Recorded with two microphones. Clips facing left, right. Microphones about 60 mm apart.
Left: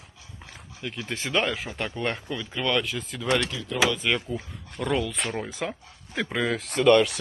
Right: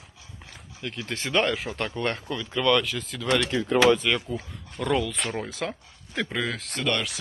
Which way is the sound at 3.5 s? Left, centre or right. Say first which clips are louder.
Right 8 dB; right.